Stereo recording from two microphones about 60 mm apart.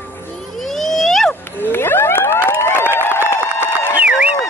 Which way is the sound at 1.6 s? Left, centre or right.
Left.